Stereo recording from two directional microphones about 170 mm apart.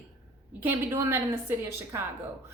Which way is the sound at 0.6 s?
15° right (ahead or behind).